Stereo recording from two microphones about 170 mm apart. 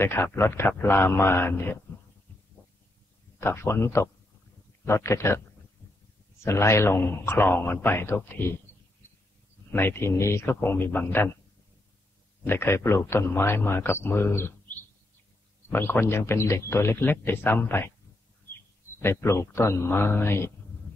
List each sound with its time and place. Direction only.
0.0 s a man's voice: 15° left (ahead or behind)
3.3 s a man's voice: 15° left (ahead or behind)
6.4 s a man's voice: 15° left (ahead or behind)
9.7 s a man's voice: 15° left (ahead or behind)
12.4 s a man's voice: 15° left (ahead or behind)
18.9 s a man's voice: 15° left (ahead or behind)